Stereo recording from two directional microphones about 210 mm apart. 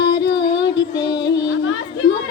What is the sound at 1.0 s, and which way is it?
Music, 55° left (ahead or behind).